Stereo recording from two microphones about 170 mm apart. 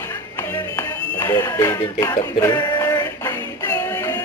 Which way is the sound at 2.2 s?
25° left (ahead or behind).